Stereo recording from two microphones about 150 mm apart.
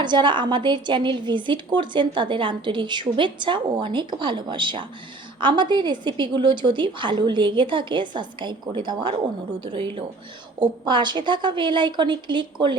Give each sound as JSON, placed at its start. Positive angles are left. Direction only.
{"t": 0.0, "sound": "a woman's voice", "side_deg": -30}